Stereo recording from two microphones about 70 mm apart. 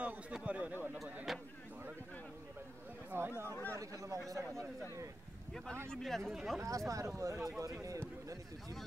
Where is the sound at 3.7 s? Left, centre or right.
Right.